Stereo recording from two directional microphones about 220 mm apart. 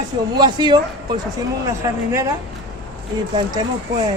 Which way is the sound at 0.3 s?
20° right (ahead or behind).